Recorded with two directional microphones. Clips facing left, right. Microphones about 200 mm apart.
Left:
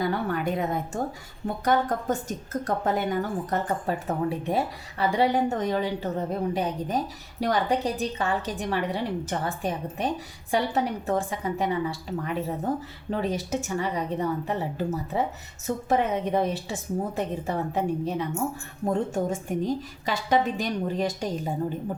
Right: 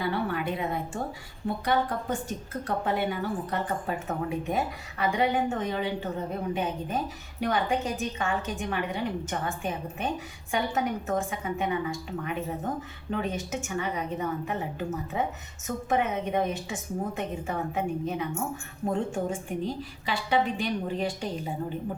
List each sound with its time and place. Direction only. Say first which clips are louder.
0.0 s a woman's voice: left 2 dB; 45° left (ahead or behind)